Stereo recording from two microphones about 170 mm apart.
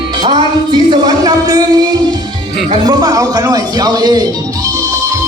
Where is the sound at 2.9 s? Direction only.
25° right (ahead or behind).